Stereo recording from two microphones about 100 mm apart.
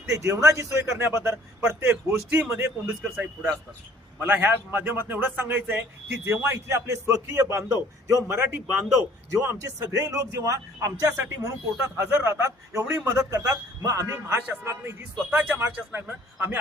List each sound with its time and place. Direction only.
0.0 s a man's voice: 30° right (ahead or behind)
9.4 s speech: 30° right (ahead or behind)